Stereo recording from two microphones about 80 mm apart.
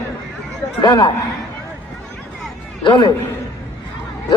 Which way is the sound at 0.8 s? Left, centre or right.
Left.